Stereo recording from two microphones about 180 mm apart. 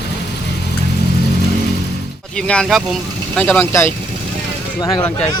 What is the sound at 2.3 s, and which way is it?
Speech, 5° left (ahead or behind).